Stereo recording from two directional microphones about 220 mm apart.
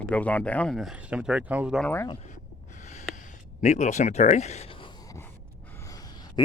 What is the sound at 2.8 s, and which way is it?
Gasp, 35° left (ahead or behind).